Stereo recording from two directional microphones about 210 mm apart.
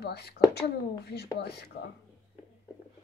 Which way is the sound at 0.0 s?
50° left (ahead or behind).